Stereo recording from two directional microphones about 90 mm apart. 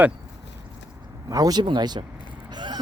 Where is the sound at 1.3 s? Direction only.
45° right (ahead or behind).